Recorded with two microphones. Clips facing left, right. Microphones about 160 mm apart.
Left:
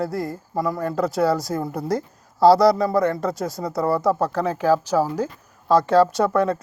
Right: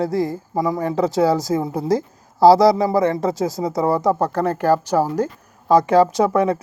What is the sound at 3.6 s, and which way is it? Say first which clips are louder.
Speech: right 1 dB; centre (ahead or behind).